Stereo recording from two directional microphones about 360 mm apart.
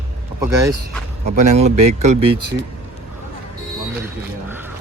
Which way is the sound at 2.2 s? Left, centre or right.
Right.